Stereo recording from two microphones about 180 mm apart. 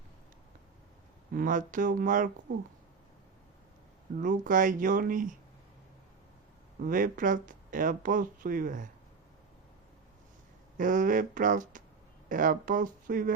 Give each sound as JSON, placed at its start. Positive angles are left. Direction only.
{"t": 1.3, "sound": "speech", "side_deg": -50}
{"t": 4.2, "sound": "speech", "side_deg": -45}
{"t": 6.8, "sound": "speech", "side_deg": -50}
{"t": 10.8, "sound": "speech", "side_deg": -45}